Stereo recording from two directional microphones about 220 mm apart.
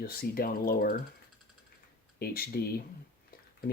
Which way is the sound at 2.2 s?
45° left (ahead or behind).